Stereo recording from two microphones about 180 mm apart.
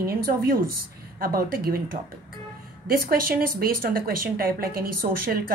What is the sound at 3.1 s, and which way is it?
A woman's voice, 55° right (ahead or behind).